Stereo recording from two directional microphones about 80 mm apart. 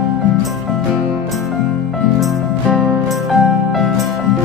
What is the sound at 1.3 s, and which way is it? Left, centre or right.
Music, centre.